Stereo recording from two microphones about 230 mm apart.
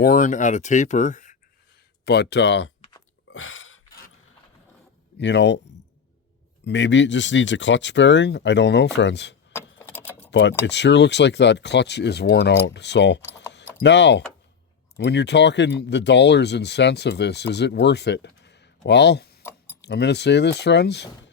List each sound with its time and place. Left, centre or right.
0.0 s speech: left
2.0 s speech: left
3.3 s a sound: left
5.1 s speech: left
6.7 s speech: left
9.5 s a sound: centre
10.7 s speech: left
19.4 s keys jangling: centre
19.8 s speech: left